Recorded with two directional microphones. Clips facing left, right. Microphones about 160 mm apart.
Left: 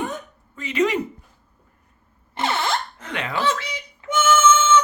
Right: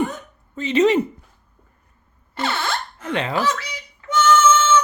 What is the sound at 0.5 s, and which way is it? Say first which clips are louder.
Speech: right 5 dB; 30° right (ahead or behind).